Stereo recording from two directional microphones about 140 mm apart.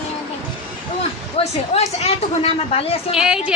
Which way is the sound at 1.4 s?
50° left (ahead or behind).